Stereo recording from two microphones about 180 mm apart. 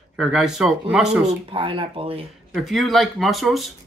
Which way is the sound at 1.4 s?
30° right (ahead or behind).